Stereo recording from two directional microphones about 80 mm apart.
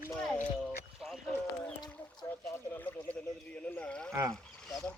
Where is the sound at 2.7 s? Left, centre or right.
Centre.